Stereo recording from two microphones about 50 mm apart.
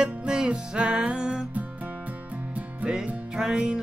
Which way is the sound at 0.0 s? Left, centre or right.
Centre.